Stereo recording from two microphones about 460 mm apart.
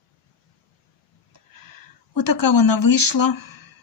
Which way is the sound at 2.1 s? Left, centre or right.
Left.